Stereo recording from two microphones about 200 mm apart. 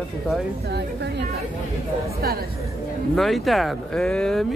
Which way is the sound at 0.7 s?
55° right (ahead or behind).